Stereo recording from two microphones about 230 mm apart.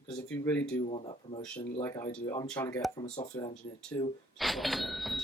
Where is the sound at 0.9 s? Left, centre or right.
Left.